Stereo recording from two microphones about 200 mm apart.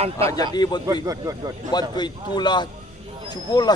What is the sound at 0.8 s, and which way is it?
Speech, 15° right (ahead or behind).